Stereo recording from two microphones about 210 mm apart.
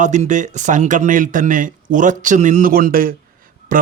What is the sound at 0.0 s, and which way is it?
Speech, 35° right (ahead or behind).